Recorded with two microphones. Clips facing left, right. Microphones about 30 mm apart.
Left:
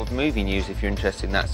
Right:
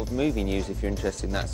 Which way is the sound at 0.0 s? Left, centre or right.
Left.